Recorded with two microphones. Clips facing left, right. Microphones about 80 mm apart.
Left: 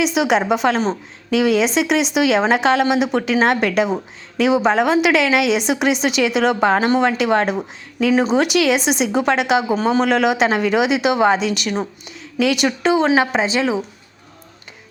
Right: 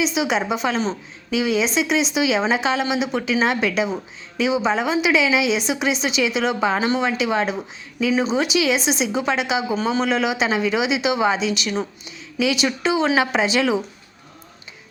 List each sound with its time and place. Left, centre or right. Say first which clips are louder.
0.0 s a woman's voice: left 4 dB; left